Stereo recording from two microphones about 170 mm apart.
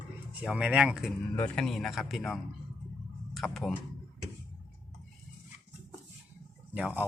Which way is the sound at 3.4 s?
Centre (ahead or behind).